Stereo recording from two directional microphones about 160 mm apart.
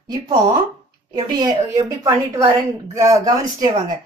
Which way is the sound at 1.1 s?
25° right (ahead or behind).